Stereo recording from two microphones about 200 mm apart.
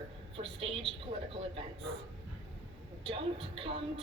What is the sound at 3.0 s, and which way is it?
Speech, 25° right (ahead or behind).